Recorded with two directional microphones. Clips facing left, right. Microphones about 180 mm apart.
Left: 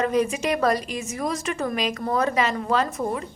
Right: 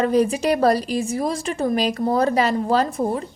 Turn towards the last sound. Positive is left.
turn(degrees=-30)  # may be behind; listen again after turning